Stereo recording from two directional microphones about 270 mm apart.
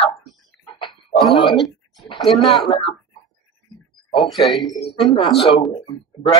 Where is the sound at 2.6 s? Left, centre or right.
Centre.